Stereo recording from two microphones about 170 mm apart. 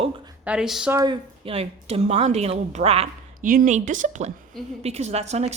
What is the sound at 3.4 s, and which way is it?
A woman's voice, 55° right (ahead or behind).